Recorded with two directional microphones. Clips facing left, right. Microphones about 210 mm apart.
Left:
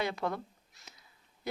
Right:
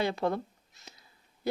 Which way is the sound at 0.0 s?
30° right (ahead or behind).